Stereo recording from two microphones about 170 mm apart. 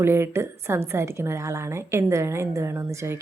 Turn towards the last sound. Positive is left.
turn(degrees=-15)  # may be behind; listen again after turning